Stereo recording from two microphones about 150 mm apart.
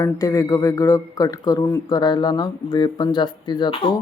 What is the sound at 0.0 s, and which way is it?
Speech, 20° left (ahead or behind).